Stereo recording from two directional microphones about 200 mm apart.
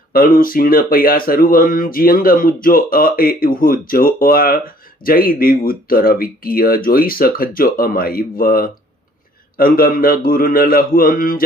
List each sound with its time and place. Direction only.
0.1 s speech: 45° left (ahead or behind)